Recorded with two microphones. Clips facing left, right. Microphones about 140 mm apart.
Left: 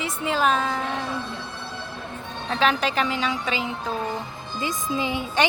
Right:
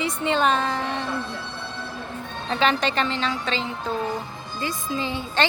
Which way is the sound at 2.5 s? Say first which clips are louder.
Even; centre (ahead or behind).